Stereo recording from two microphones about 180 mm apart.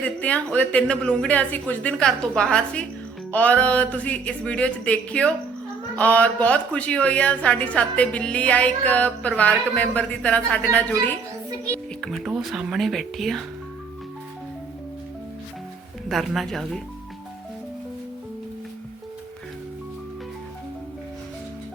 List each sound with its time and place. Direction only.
0.0 s a woman's voice: 10° left (ahead or behind)
12.0 s speech: centre (ahead or behind)
16.0 s speech: centre (ahead or behind)